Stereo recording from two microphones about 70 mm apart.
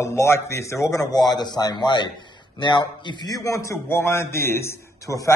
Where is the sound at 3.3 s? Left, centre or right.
Left.